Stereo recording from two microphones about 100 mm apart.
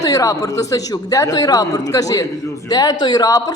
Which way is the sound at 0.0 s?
35° left (ahead or behind).